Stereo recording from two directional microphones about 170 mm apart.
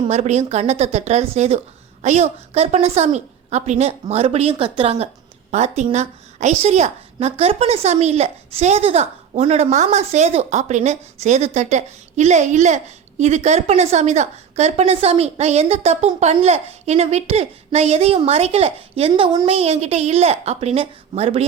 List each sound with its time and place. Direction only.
0.1 s a woman's voice: 40° right (ahead or behind)